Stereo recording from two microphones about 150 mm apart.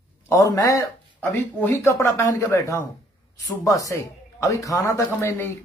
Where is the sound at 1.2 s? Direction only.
10° left (ahead or behind).